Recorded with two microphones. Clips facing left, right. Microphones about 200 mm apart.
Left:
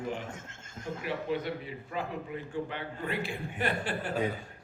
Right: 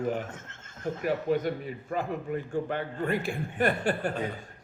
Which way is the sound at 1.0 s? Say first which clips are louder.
Right 6 dB; 45° right (ahead or behind).